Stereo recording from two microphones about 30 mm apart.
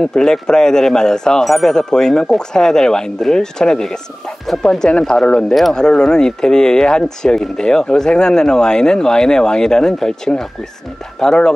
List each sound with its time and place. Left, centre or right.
0.0 s speech: left
1.4 s speech: centre
1.7 s speech: centre